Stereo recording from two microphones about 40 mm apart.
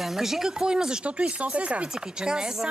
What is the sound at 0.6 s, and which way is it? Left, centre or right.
Speech, centre.